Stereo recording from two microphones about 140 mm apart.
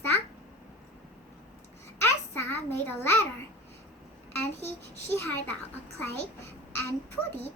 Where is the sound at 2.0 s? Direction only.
15° left (ahead or behind).